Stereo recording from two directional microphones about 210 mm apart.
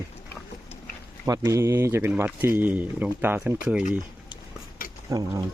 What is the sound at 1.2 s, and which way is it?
Speech, 15° right (ahead or behind).